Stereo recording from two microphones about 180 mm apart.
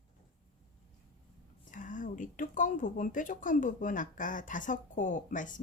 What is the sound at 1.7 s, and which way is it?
A woman's voice, 45° left (ahead or behind).